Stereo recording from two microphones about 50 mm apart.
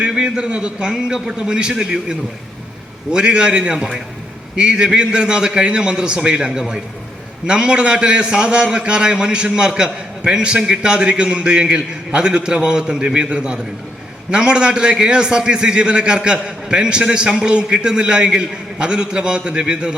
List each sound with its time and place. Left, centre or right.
0.0 s a man's voice: right